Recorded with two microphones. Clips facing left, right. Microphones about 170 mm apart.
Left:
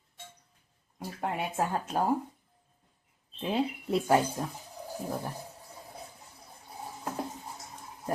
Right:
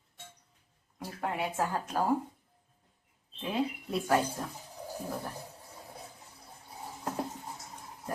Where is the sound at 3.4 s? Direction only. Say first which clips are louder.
Left 2 dB; 30° left (ahead or behind).